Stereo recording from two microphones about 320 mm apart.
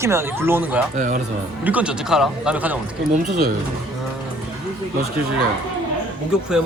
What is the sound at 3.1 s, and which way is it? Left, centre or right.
Speech, right.